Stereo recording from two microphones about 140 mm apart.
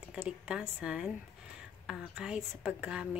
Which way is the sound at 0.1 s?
5° right (ahead or behind).